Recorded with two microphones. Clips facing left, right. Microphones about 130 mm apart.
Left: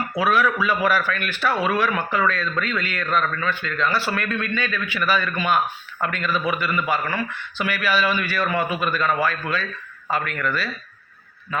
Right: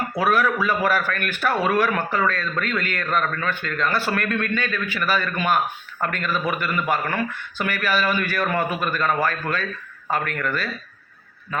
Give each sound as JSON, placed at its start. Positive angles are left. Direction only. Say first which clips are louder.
{"t": 0.2, "sound": "a man's voice", "louder": "even", "side_deg": -45}